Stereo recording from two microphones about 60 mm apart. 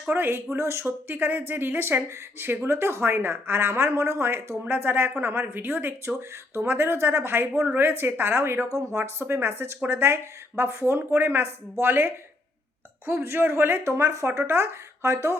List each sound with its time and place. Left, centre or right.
0.1 s speech: right
6.1 s speech: right
8.7 s speech: right
14.4 s speech: right